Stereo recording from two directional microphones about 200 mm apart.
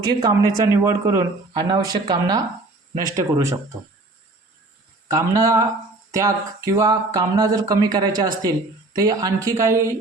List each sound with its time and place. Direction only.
0.0 s speech: 20° right (ahead or behind)
5.0 s speech: 15° right (ahead or behind)